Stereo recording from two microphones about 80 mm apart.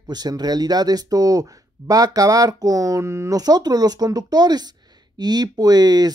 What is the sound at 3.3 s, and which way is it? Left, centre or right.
Speech, right.